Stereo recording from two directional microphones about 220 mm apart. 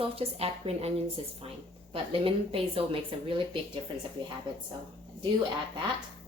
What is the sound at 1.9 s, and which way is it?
A woman's voice, 25° right (ahead or behind).